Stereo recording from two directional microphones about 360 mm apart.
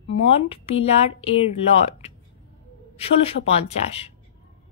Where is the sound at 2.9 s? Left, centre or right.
Centre.